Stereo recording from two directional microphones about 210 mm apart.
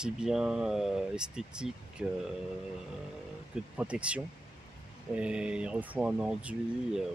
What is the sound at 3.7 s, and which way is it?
Speech, 5° right (ahead or behind).